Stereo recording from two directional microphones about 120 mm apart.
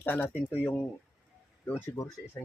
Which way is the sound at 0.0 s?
15° left (ahead or behind).